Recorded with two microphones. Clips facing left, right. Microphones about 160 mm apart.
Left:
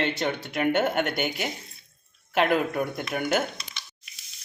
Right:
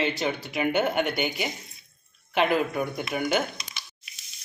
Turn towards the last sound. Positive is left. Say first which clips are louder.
# even
turn(degrees=0)  # may be behind; listen again after turning